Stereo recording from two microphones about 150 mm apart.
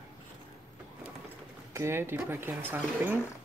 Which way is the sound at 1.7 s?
15° right (ahead or behind).